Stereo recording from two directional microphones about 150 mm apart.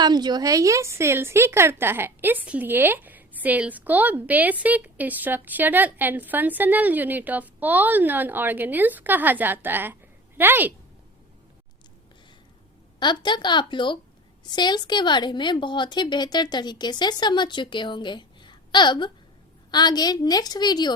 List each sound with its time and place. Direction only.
0.0 s speech: 30° right (ahead or behind)
13.0 s a woman's voice: 30° left (ahead or behind)